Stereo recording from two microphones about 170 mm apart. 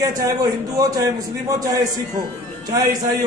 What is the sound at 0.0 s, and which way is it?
A man's voice, 20° right (ahead or behind).